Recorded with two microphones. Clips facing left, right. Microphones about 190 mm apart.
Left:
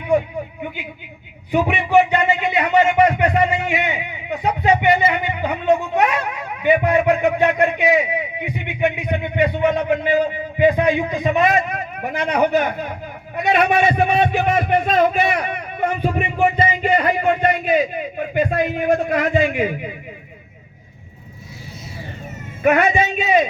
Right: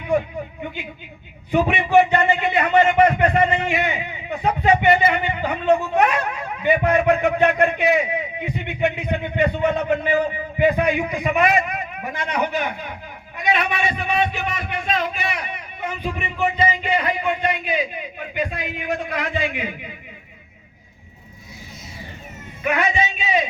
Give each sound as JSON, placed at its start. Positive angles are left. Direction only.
{"t": 1.5, "sound": "a man's voice", "side_deg": 10}
{"t": 12.3, "sound": "a man's voice", "side_deg": 50}
{"t": 22.6, "sound": "a man's voice", "side_deg": 50}